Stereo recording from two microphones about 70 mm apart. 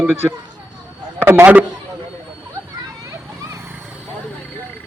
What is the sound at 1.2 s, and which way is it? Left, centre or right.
Speech, right.